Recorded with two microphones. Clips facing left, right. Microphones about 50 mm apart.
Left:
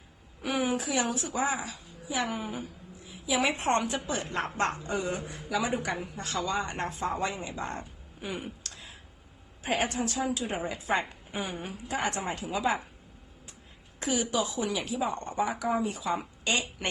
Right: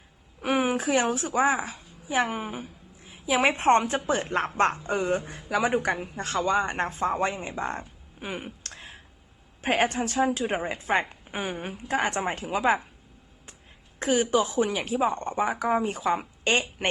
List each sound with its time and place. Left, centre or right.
0.4 s a woman's voice: right
8.7 s a sound: right
9.6 s a woman's voice: right
14.0 s a woman's voice: right